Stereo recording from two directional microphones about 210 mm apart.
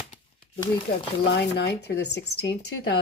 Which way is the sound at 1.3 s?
55° left (ahead or behind).